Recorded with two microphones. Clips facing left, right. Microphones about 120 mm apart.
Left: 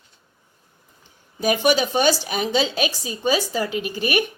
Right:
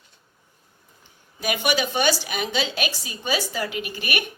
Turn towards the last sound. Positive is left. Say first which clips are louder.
# left 6 dB
turn(degrees=35)  # may be behind; listen again after turning